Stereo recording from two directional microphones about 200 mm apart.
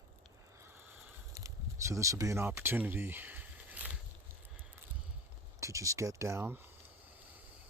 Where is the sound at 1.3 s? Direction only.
15° right (ahead or behind).